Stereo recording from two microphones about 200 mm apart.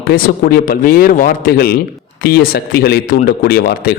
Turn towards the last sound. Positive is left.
turn(degrees=50)  # may be behind; listen again after turning